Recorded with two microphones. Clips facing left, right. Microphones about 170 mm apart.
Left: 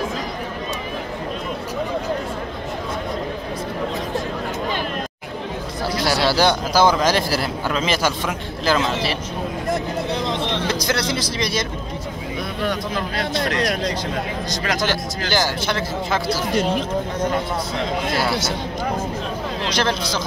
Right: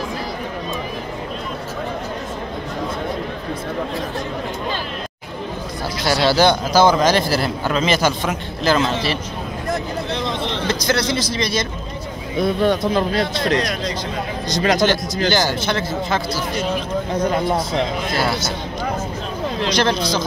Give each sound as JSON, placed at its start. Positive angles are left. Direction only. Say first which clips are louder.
{"t": 6.0, "sound": "a man's voice", "louder": "right 3 dB", "side_deg": 5}
{"t": 10.7, "sound": "speech", "louder": "right 2 dB", "side_deg": 5}
{"t": 12.6, "sound": "speech", "louder": "right 4 dB", "side_deg": -25}
{"t": 14.6, "sound": "speech", "louder": "right 8 dB", "side_deg": -20}
{"t": 15.3, "sound": "a man's voice", "louder": "left 3 dB", "side_deg": 5}
{"t": 19.7, "sound": "a man's voice", "louder": "right 3 dB", "side_deg": 5}